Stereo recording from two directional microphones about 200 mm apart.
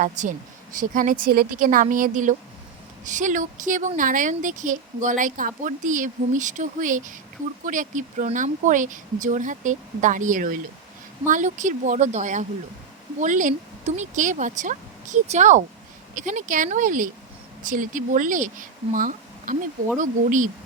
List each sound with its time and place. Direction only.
0.0 s speech: 40° right (ahead or behind)
18.9 s a sound: 45° right (ahead or behind)
20.0 s speech: 40° right (ahead or behind)